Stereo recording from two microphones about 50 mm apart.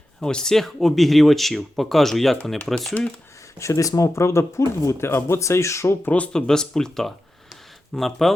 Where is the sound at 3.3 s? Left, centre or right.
Left.